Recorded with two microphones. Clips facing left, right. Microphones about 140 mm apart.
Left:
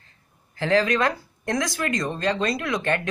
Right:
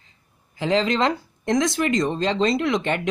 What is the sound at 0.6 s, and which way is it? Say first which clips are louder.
Speech: even; 20° right (ahead or behind).